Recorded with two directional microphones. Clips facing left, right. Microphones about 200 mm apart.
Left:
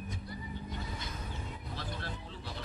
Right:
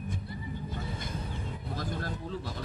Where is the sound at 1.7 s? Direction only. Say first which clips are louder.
Right 7 dB; 45° right (ahead or behind).